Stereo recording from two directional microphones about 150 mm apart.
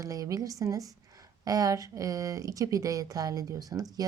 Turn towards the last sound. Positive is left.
turn(degrees=-25)  # may be behind; listen again after turning